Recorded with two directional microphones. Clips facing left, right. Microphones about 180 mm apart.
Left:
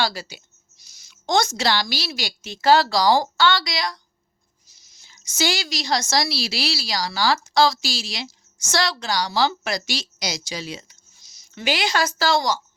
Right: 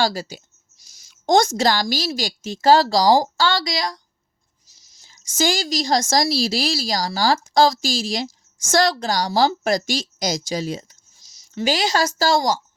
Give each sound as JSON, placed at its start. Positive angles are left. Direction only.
{"t": 0.0, "sound": "a woman's voice", "side_deg": -45}